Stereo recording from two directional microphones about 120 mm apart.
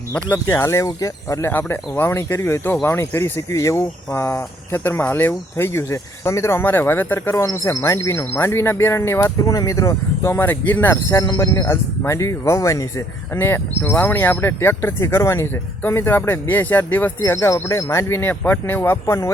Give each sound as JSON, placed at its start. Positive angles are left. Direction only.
{"t": 0.1, "sound": "speech", "side_deg": 15}